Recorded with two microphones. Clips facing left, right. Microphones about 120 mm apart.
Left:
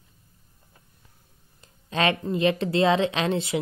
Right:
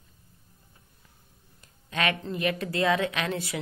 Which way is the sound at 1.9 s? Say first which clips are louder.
Left 5 dB; 30° left (ahead or behind).